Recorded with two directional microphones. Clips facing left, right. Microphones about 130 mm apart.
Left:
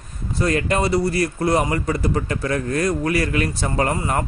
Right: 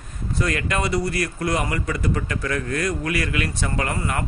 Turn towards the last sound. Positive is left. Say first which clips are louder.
# left 4 dB
turn(degrees=35)  # may be behind; listen again after turning